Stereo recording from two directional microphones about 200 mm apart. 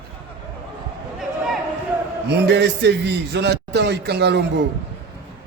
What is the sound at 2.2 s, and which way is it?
A man's voice, 60° right (ahead or behind).